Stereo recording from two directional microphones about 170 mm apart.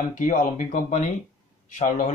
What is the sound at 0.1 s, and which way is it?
Speech, 50° left (ahead or behind).